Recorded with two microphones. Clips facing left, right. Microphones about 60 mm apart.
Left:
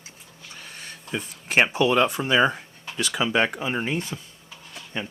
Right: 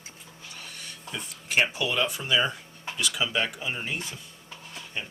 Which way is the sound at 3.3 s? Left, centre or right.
Left.